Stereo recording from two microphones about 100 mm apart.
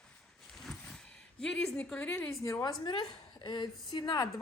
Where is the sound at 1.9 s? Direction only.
15° left (ahead or behind).